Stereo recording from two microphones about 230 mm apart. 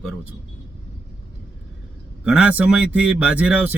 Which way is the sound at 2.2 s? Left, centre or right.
Centre.